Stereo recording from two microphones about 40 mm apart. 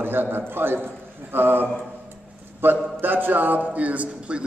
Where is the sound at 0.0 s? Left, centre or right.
Right.